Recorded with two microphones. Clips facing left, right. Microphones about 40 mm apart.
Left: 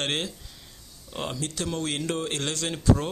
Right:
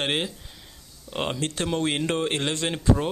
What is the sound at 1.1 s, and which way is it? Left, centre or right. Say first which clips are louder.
Speech: right 4 dB; right.